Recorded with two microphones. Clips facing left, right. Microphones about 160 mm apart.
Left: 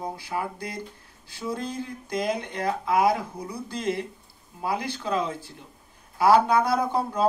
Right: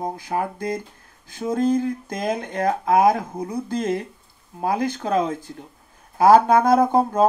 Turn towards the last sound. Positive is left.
turn(degrees=-45)  # may be behind; listen again after turning